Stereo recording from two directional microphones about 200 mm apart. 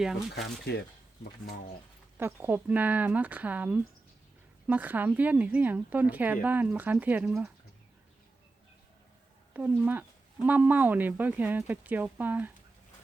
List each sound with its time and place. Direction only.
0.0 s speech: centre (ahead or behind)
0.7 s speech: 55° left (ahead or behind)
2.1 s speech: 10° right (ahead or behind)
9.5 s speech: 10° right (ahead or behind)